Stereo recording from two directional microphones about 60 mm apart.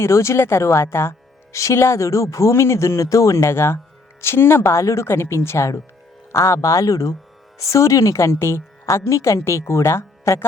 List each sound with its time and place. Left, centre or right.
0.0 s a man's voice: left